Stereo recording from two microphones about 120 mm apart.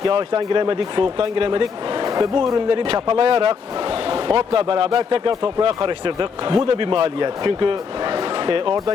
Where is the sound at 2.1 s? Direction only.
35° right (ahead or behind).